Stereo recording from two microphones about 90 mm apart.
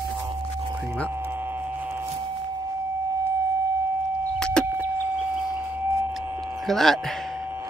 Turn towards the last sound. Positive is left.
turn(degrees=5)  # may be behind; listen again after turning